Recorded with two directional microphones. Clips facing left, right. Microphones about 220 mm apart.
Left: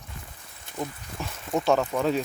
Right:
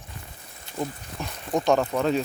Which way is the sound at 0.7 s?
50° left (ahead or behind).